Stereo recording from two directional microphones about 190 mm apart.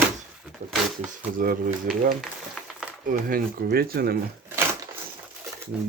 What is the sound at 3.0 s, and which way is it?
Speech, 45° right (ahead or behind).